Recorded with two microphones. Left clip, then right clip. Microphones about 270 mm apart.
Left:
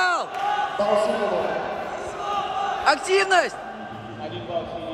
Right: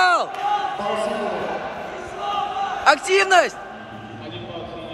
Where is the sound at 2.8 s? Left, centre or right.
Centre.